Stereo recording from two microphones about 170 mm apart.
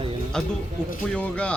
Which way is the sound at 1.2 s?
5° left (ahead or behind).